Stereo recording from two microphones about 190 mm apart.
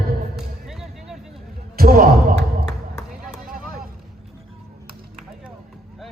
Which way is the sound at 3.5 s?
45° right (ahead or behind).